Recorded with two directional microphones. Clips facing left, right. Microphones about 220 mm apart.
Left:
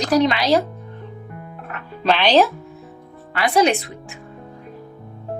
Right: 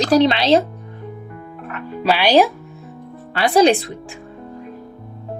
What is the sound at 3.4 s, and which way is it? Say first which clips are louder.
Speech: right 4 dB; 30° right (ahead or behind).